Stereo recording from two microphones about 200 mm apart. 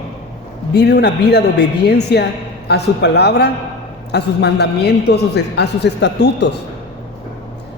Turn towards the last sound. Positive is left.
turn(degrees=60)  # may be behind; listen again after turning